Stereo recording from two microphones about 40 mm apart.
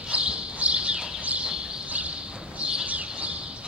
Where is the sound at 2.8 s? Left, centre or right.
Right.